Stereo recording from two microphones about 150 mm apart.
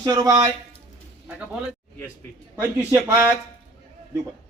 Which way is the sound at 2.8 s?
15° right (ahead or behind).